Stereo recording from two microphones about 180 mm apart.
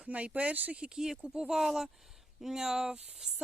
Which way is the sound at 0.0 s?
5° right (ahead or behind).